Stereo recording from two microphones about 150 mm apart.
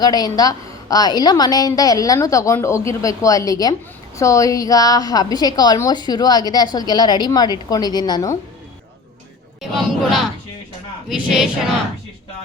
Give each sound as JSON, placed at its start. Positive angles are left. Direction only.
{"t": 0.0, "sound": "a woman's voice", "side_deg": 25}
{"t": 9.6, "sound": "speech", "side_deg": 0}